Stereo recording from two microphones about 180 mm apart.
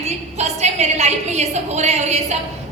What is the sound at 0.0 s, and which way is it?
A woman's voice, 40° right (ahead or behind).